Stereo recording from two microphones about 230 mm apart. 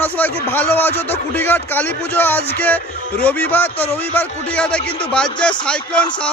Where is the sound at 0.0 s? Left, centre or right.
Centre.